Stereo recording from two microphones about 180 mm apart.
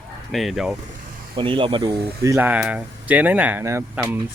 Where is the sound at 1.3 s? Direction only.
30° right (ahead or behind).